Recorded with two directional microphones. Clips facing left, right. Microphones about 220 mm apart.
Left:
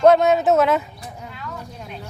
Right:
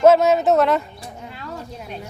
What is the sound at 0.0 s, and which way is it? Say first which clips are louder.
Speech: right 1 dB; centre (ahead or behind).